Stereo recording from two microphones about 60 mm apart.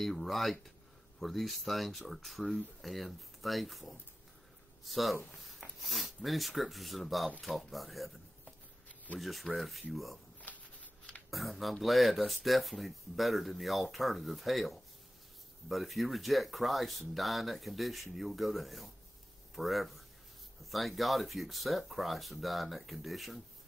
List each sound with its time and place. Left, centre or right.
0.0 s speech: centre
10.4 s a sound: left
11.2 s speech: centre